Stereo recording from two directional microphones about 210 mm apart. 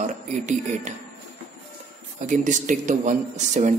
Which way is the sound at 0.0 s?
35° right (ahead or behind).